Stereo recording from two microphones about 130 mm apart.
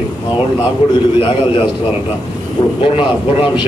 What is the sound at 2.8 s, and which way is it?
Speech, 40° left (ahead or behind).